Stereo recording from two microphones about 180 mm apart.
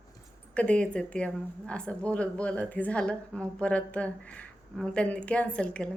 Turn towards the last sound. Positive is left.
turn(degrees=5)  # may be behind; listen again after turning